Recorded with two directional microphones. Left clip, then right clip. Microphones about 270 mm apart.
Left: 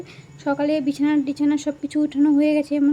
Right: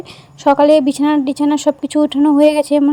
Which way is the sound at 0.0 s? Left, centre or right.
Right.